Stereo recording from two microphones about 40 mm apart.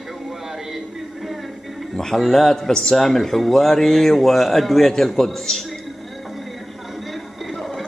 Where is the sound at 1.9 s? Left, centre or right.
Centre.